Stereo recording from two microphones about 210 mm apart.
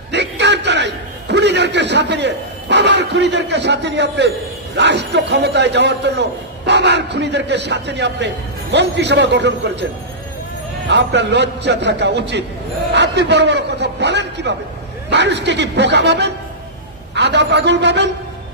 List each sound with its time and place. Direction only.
0.1 s a sound: 55° right (ahead or behind)
4.7 s a man's voice: 55° right (ahead or behind)
10.9 s a man's voice: 55° right (ahead or behind)